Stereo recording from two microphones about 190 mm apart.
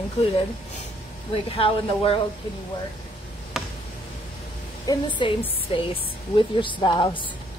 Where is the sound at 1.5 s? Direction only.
30° left (ahead or behind).